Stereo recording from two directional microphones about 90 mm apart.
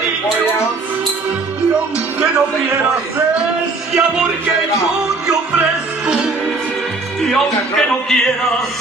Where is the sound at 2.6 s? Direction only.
15° right (ahead or behind).